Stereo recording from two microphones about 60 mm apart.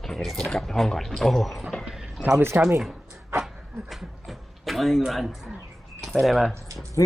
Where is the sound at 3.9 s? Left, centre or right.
Centre.